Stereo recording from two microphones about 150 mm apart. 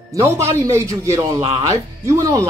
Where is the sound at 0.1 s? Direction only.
20° right (ahead or behind).